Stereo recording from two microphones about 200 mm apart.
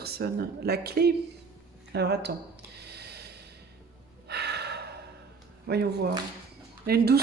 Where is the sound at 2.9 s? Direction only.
55° right (ahead or behind).